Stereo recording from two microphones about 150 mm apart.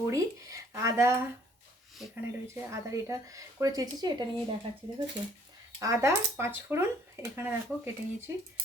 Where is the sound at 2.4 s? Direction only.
20° right (ahead or behind).